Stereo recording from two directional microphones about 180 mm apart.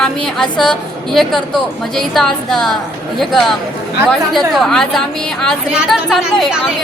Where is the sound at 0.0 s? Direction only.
5° left (ahead or behind).